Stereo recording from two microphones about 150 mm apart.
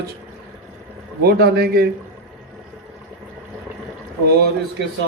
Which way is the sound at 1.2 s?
90° right.